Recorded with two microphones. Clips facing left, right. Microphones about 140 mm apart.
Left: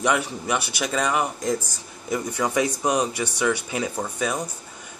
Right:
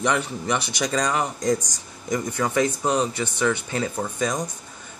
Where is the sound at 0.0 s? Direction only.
10° left (ahead or behind).